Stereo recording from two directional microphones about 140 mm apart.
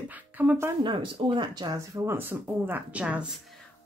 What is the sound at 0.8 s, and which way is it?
Speech, 35° right (ahead or behind).